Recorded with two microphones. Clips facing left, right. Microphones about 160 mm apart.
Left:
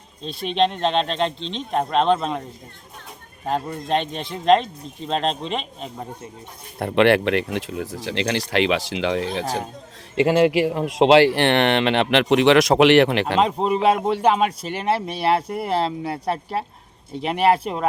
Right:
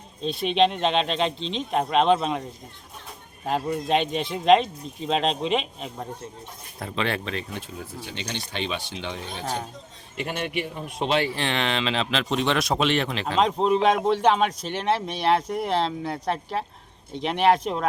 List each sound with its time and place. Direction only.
0.2 s speech: centre (ahead or behind)
3.4 s speech: 5° right (ahead or behind)
6.7 s speech: 65° left (ahead or behind)
13.4 s speech: 5° left (ahead or behind)